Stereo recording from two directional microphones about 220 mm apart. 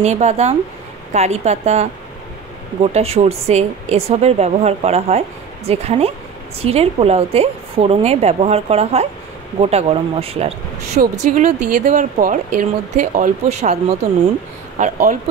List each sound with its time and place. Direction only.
0.0 s a woman's voice: 30° right (ahead or behind)